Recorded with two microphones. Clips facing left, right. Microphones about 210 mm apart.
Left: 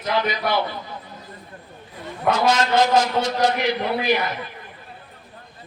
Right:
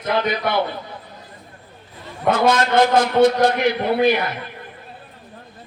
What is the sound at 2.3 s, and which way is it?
A man's voice, 55° right (ahead or behind).